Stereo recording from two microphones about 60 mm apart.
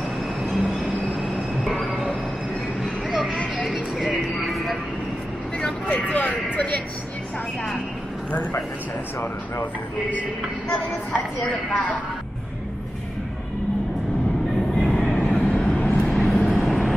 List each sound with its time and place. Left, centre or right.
1.2 s train: centre
2.8 s vehicle: centre
3.6 s a sound: centre
5.6 s speech: left
10.7 s a woman's voice: left
14.8 s train: centre
15.2 s vehicle: centre
16.1 s vehicle: centre